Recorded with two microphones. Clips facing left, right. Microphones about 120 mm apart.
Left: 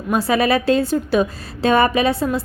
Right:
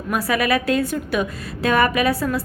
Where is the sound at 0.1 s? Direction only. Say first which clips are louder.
Left 3 dB; 25° left (ahead or behind).